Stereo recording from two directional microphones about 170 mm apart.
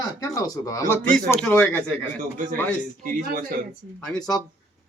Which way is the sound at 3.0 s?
60° right (ahead or behind).